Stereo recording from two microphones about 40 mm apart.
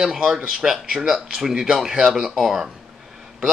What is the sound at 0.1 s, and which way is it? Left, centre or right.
Speech, centre.